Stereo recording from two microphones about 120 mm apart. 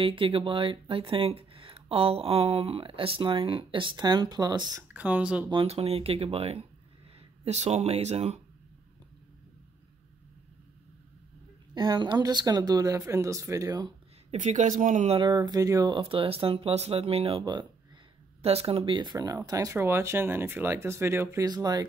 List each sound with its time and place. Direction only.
0.0 s speech: 45° right (ahead or behind)
4.9 s speech: 10° right (ahead or behind)
5.5 s speech: 50° right (ahead or behind)
11.7 s speech: 35° right (ahead or behind)
14.3 s speech: 85° right
15.1 s speech: 35° right (ahead or behind)
16.0 s speech: 50° right (ahead or behind)
18.4 s speech: 55° right (ahead or behind)
19.1 s speech: 30° right (ahead or behind)
21.5 s speech: 35° right (ahead or behind)